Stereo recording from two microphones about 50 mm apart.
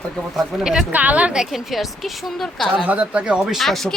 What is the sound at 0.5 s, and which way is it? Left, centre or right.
Speech, centre.